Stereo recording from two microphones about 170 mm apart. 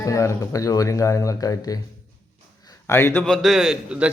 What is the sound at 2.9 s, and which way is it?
A man's voice, 15° left (ahead or behind).